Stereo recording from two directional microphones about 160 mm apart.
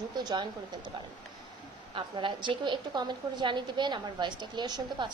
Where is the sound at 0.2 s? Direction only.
25° right (ahead or behind).